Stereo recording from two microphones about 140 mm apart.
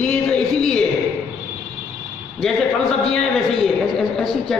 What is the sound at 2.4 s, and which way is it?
A man's voice, centre (ahead or behind).